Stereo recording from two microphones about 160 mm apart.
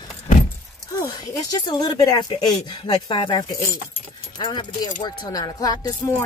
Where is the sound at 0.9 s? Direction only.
25° left (ahead or behind).